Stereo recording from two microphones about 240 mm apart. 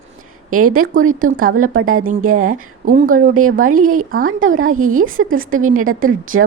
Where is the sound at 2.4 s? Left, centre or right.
Right.